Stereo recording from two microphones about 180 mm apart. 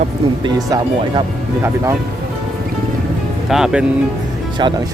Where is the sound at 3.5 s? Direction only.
5° right (ahead or behind).